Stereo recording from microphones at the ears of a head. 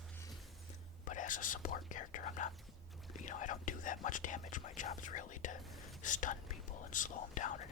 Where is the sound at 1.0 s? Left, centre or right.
Left.